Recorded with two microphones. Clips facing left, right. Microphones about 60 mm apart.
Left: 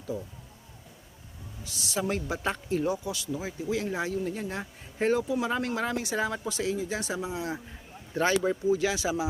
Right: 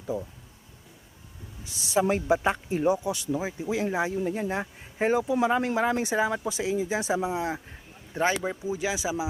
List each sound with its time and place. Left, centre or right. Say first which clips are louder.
1.6 s speech: right 6 dB; right